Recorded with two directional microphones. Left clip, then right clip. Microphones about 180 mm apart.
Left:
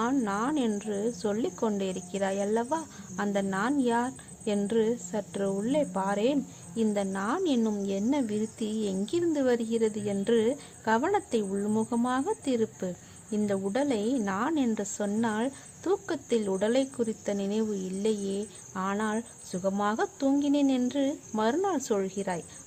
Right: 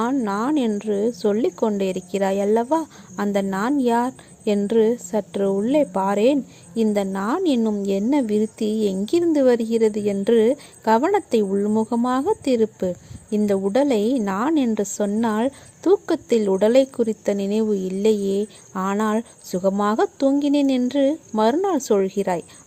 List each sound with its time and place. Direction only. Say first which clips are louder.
0.0 s a woman's voice: right 6 dB; 30° right (ahead or behind)